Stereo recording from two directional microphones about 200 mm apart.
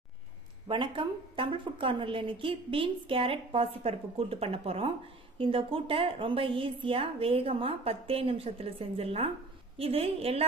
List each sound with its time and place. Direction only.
0.7 s a woman's voice: 25° right (ahead or behind)